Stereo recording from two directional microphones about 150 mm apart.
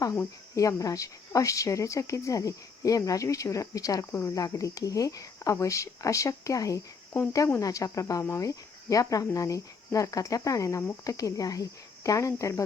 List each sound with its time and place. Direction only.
0.0 s speech: 20° left (ahead or behind)